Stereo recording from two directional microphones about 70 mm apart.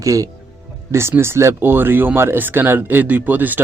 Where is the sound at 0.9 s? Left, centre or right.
Right.